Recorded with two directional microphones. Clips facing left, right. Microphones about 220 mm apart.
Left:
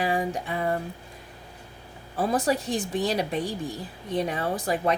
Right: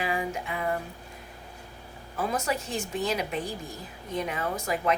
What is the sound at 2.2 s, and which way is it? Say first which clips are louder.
A woman's voice: left 5 dB; 35° left (ahead or behind).